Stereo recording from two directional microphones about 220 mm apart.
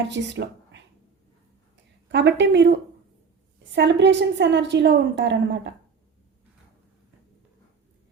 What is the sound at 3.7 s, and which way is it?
Speech, 50° right (ahead or behind).